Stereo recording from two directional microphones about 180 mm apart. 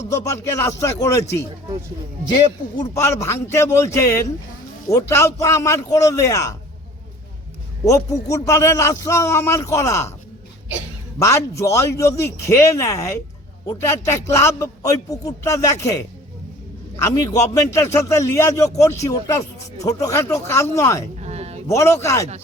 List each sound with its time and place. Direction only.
0.1 s a man's voice: 15° left (ahead or behind)
2.9 s a man's voice: 15° left (ahead or behind)
7.9 s a man's voice: 15° left (ahead or behind)
11.2 s a man's voice: 15° left (ahead or behind)
21.2 s a sound: 35° right (ahead or behind)
21.7 s a man's voice: 15° left (ahead or behind)